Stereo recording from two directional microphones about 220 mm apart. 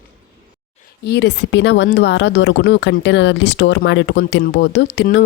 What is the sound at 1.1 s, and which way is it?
Speech, 50° left (ahead or behind).